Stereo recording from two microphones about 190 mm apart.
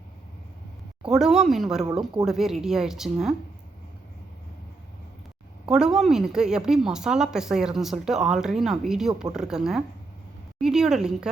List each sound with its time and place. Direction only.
1.0 s a woman's voice: 5° right (ahead or behind)
5.6 s a woman's voice: 5° right (ahead or behind)